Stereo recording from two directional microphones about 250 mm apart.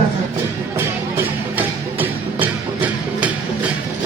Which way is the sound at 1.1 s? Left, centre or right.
Centre.